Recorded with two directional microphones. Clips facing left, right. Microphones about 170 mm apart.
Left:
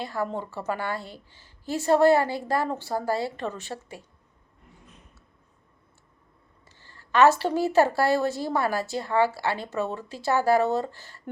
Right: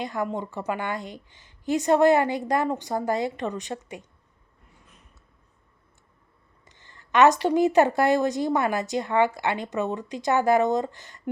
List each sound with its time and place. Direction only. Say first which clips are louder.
0.0 s a woman's voice: right 1 dB; 15° right (ahead or behind)
6.7 s a sound: right 1 dB; 20° right (ahead or behind)
7.1 s a woman's voice: right 1 dB; 20° right (ahead or behind)